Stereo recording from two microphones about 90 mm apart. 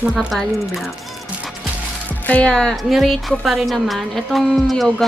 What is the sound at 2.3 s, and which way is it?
A woman's voice, 10° left (ahead or behind).